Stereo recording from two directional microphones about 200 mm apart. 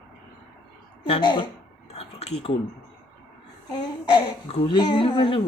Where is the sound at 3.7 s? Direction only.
20° left (ahead or behind).